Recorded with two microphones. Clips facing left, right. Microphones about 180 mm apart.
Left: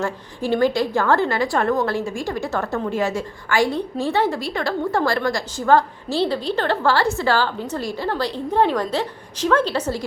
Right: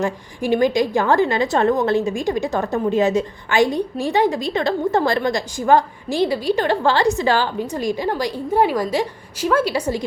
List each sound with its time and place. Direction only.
0.0 s a woman's voice: 15° right (ahead or behind)